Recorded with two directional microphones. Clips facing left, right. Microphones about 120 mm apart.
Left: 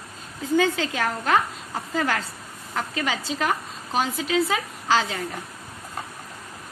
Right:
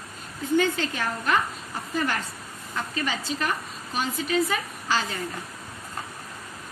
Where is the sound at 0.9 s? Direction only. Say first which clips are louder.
Left 3 dB; 90° left.